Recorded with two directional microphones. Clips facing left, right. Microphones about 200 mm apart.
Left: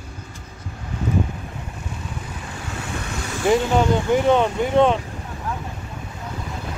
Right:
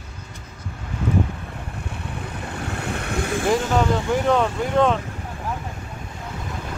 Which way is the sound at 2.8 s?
60° right (ahead or behind).